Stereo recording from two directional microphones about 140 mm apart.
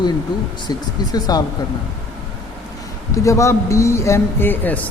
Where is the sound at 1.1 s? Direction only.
30° left (ahead or behind).